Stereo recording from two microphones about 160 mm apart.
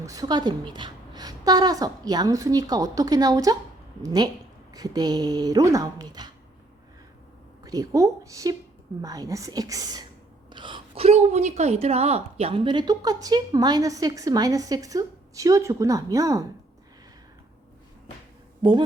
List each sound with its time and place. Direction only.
0.0 s a woman's voice: 20° right (ahead or behind)
7.6 s a woman's voice: 25° right (ahead or behind)
18.6 s a woman's voice: 30° right (ahead or behind)